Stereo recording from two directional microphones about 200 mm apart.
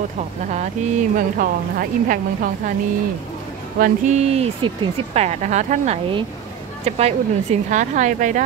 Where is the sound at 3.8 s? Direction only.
35° right (ahead or behind).